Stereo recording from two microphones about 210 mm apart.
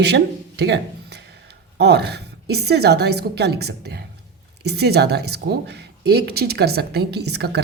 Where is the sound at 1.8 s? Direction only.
50° right (ahead or behind).